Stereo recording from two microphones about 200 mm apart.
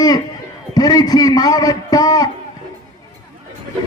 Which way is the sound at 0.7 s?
20° left (ahead or behind).